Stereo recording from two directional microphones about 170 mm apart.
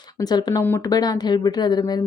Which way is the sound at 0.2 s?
25° left (ahead or behind).